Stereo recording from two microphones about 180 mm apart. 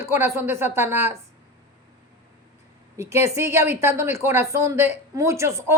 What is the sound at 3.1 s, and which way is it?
Speech, 15° right (ahead or behind).